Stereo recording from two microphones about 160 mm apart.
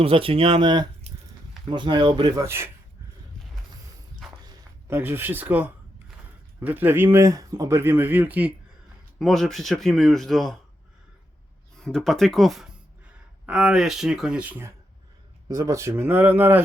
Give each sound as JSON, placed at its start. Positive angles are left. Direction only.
{"t": 0.0, "sound": "speech", "side_deg": -35}
{"t": 1.1, "sound": "a sound", "side_deg": -40}
{"t": 1.7, "sound": "speech", "side_deg": -30}
{"t": 2.3, "sound": "speech", "side_deg": -15}
{"t": 4.2, "sound": "walk", "side_deg": 0}
{"t": 4.9, "sound": "speech", "side_deg": -15}
{"t": 9.1, "sound": "speech", "side_deg": 0}
{"t": 11.8, "sound": "speech", "side_deg": 5}
{"t": 15.4, "sound": "speech", "side_deg": -20}